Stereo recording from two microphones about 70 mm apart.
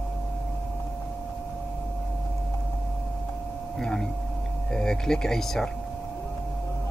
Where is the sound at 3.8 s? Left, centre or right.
Centre.